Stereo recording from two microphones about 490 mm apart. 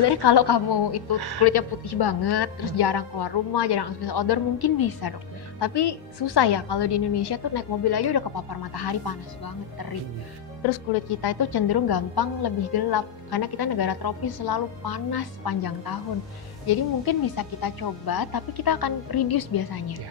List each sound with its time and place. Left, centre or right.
0.0 s a woman's voice: left
1.1 s speech: right
1.4 s a woman's voice: left
11.1 s a woman's voice: left